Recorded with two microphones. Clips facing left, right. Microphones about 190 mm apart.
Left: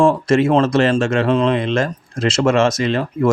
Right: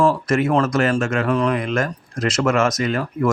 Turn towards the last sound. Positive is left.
turn(degrees=25)  # may be behind; listen again after turning